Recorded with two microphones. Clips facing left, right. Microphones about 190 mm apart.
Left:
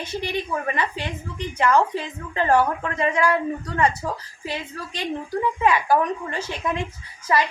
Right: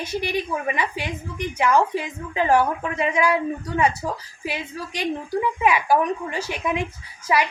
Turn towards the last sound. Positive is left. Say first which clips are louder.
# even
turn(degrees=-10)  # may be behind; listen again after turning